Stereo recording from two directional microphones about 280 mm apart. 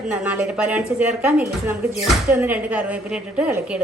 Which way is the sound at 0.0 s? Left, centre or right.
Centre.